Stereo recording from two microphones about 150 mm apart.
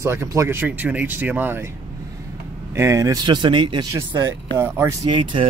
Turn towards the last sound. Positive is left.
turn(degrees=-30)  # may be behind; listen again after turning